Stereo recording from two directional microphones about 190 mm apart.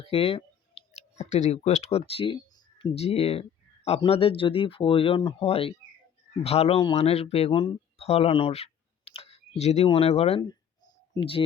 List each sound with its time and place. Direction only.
0.0 s speech: 30° left (ahead or behind)